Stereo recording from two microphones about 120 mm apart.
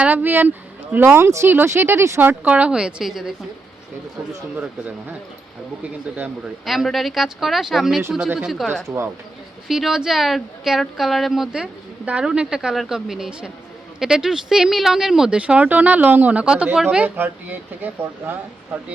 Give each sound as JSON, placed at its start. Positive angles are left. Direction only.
{"t": 0.0, "sound": "speech", "side_deg": -15}
{"t": 5.8, "sound": "speech", "side_deg": -15}
{"t": 6.7, "sound": "speech", "side_deg": 0}